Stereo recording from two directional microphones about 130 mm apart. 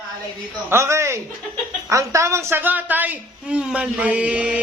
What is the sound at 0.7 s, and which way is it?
A man's voice, 20° right (ahead or behind).